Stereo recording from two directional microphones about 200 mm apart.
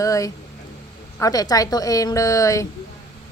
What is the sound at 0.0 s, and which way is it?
A woman's voice, 15° left (ahead or behind).